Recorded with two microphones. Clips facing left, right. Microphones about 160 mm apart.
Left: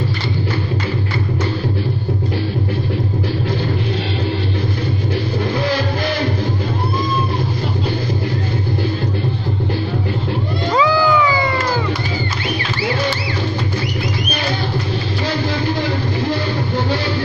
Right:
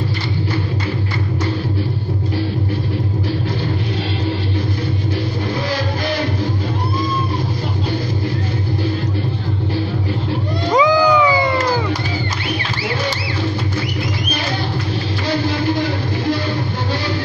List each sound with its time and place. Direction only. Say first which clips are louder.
10.7 s cat: right 2 dB; 15° right (ahead or behind)